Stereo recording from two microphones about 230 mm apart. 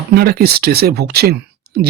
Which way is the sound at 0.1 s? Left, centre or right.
Right.